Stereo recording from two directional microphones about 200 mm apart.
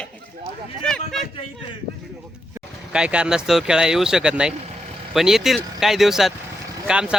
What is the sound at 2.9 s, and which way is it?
Speech, 5° right (ahead or behind).